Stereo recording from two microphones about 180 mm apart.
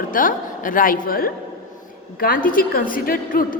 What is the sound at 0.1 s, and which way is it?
A woman's voice, 50° left (ahead or behind).